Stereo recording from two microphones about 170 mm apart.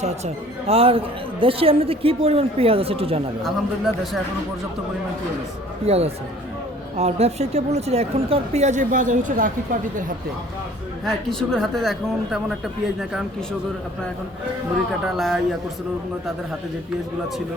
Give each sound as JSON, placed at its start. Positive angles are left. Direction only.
{"t": 0.7, "sound": "a woman's voice", "side_deg": -35}
{"t": 3.4, "sound": "speech", "side_deg": 0}
{"t": 5.8, "sound": "a woman's voice", "side_deg": -40}
{"t": 11.0, "sound": "speech", "side_deg": 0}
{"t": 15.0, "sound": "speech", "side_deg": 0}